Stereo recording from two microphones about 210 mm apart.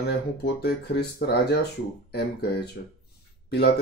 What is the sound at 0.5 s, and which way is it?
Speech, 50° left (ahead or behind).